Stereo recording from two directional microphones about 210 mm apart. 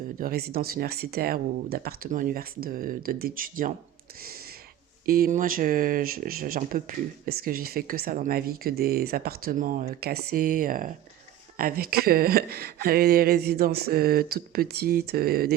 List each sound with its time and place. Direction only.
0.2 s speech: 45° right (ahead or behind)
4.2 s a sound: 45° right (ahead or behind)
5.0 s speech: 45° right (ahead or behind)